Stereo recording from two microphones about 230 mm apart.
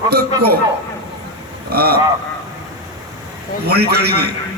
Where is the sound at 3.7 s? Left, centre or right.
Right.